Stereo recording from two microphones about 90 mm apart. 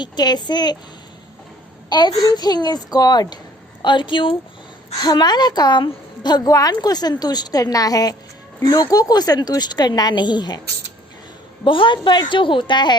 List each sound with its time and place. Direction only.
0.0 s a woman's voice: 50° left (ahead or behind)
1.9 s a woman's voice: 50° left (ahead or behind)
3.8 s a woman's voice: 65° left (ahead or behind)
4.9 s a woman's voice: 50° left (ahead or behind)
11.6 s a woman's voice: 70° left (ahead or behind)